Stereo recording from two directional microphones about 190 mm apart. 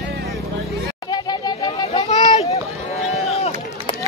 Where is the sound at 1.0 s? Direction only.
20° left (ahead or behind).